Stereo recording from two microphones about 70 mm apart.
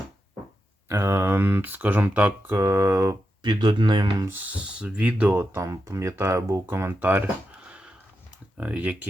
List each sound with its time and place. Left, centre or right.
0.9 s speech: right
2.6 s speech: right
3.4 s speech: right
4.5 s speech: centre
5.3 s speech: right